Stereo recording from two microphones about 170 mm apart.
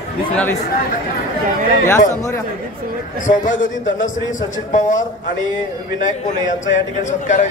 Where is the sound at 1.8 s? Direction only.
15° left (ahead or behind).